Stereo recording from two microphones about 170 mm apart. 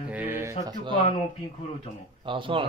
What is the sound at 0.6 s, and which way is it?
Speech, 25° right (ahead or behind).